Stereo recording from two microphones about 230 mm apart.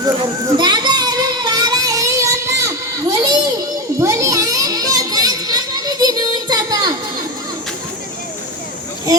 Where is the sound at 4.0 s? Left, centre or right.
Centre.